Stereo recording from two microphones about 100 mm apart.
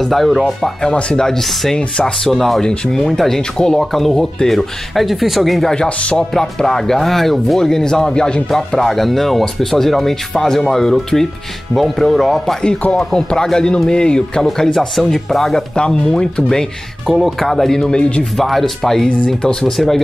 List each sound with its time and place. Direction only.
0.0 s speech: centre (ahead or behind)